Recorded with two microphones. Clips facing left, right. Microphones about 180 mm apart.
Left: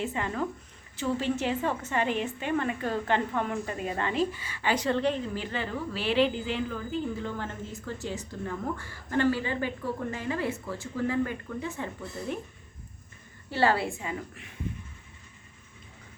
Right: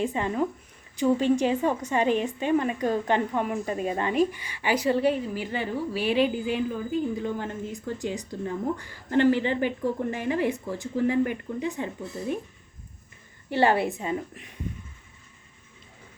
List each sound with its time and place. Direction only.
0.1 s a woman's voice: 15° right (ahead or behind)
13.5 s a woman's voice: 20° right (ahead or behind)